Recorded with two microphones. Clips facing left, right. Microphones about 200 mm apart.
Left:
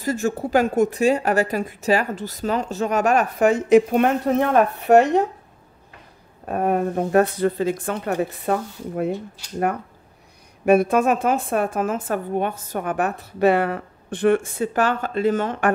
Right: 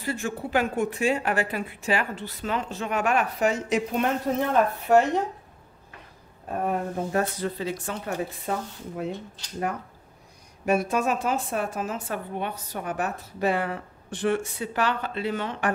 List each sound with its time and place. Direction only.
0.0 s a woman's voice: 40° left (ahead or behind); by 5.0 s 65° left (ahead or behind)
6.4 s a woman's voice: 65° left (ahead or behind)
10.6 s a woman's voice: 60° left (ahead or behind)